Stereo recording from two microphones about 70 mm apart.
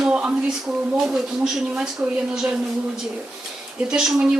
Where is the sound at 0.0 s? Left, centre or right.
Centre.